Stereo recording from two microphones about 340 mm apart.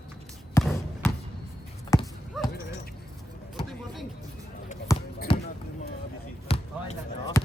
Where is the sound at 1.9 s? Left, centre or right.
Centre.